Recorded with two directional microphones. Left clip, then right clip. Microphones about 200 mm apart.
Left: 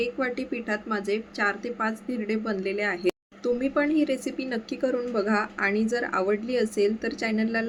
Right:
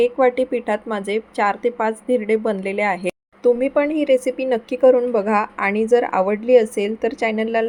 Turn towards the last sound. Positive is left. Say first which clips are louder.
# right 8 dB
turn(degrees=-15)  # may be behind; listen again after turning